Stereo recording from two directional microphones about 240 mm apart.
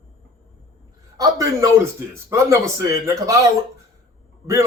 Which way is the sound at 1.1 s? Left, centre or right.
Centre.